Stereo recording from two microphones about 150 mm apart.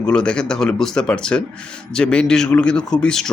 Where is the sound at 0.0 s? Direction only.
5° left (ahead or behind).